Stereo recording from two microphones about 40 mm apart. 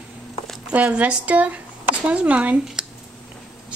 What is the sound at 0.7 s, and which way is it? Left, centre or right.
Speech, right.